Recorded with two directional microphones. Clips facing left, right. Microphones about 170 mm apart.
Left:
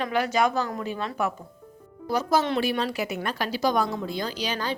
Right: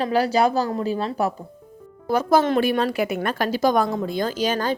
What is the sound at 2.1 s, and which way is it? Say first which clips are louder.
A woman's voice: right 5 dB; 55° right (ahead or behind).